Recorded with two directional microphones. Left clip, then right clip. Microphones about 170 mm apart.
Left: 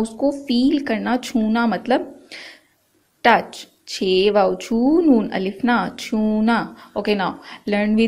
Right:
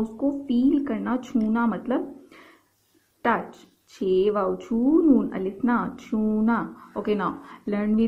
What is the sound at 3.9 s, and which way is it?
A woman's voice, 20° left (ahead or behind).